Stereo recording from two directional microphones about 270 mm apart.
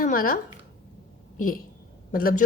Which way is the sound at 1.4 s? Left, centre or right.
Left.